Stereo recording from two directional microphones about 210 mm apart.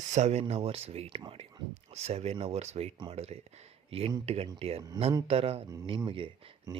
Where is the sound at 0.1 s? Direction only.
30° right (ahead or behind).